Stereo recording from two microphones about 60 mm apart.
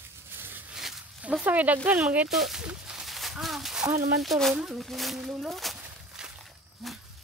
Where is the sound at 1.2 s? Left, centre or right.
Right.